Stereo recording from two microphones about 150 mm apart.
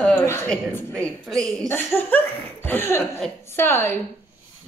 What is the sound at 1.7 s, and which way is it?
A woman's voice, 15° left (ahead or behind).